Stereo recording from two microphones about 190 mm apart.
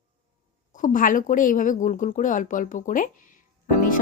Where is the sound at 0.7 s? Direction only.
45° left (ahead or behind).